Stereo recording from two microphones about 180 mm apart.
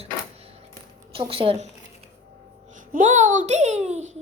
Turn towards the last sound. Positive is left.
turn(degrees=-40)  # may be behind; listen again after turning